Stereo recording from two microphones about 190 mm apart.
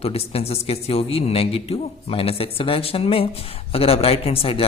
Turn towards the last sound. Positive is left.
turn(degrees=30)  # may be behind; listen again after turning